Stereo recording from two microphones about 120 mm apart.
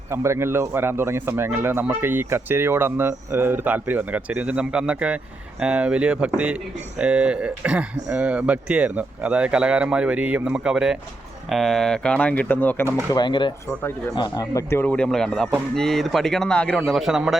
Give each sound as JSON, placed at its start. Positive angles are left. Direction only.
{"t": 0.1, "sound": "speech", "side_deg": -20}
{"t": 13.1, "sound": "speech", "side_deg": 40}